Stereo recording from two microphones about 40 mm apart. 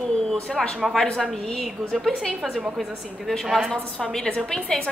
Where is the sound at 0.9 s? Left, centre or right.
Centre.